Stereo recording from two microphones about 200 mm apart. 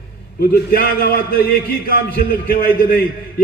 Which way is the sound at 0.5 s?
45° left (ahead or behind).